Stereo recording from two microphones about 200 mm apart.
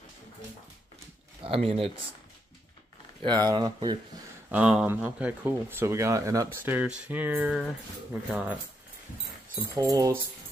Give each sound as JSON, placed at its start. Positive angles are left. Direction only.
{"t": 0.9, "sound": "a sound", "side_deg": -30}
{"t": 3.3, "sound": "speech", "side_deg": -20}
{"t": 4.5, "sound": "speech", "side_deg": -5}
{"t": 9.8, "sound": "speech", "side_deg": -20}